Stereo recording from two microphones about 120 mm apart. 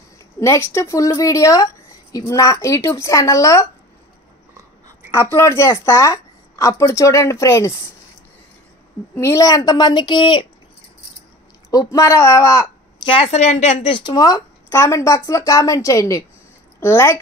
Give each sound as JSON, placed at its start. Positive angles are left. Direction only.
{"t": 0.4, "sound": "a woman's voice", "side_deg": 20}
{"t": 5.1, "sound": "a woman's voice", "side_deg": 20}
{"t": 9.1, "sound": "a woman's voice", "side_deg": 25}
{"t": 11.7, "sound": "a woman's voice", "side_deg": 30}
{"t": 13.0, "sound": "a woman's voice", "side_deg": 50}
{"t": 13.9, "sound": "a woman's voice", "side_deg": 35}